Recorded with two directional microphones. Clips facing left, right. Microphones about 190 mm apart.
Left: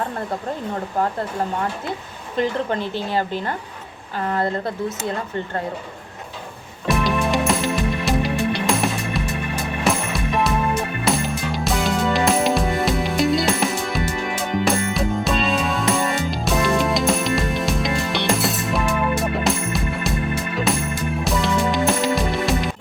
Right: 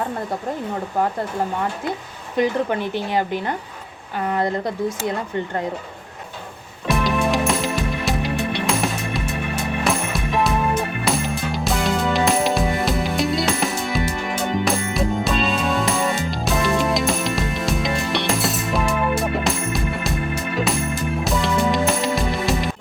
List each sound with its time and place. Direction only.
2.3 s speech: 10° right (ahead or behind)
6.8 s music: centre (ahead or behind)